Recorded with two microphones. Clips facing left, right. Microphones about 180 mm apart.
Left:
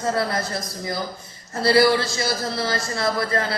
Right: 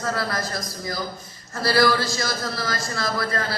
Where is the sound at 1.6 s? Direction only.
25° left (ahead or behind).